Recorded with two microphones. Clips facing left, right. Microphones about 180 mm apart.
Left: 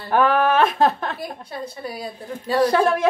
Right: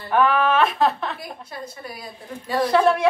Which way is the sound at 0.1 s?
40° left (ahead or behind).